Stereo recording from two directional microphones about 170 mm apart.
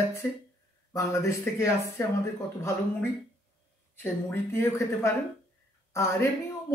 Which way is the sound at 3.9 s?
10° left (ahead or behind).